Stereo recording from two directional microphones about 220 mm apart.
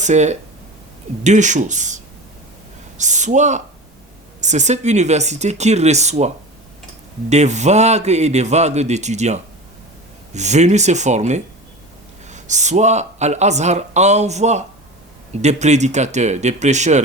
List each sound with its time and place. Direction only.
0.0 s speech: 30° right (ahead or behind)
3.0 s speech: 35° right (ahead or behind)